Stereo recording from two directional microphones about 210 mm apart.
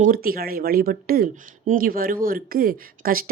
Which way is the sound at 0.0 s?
45° right (ahead or behind).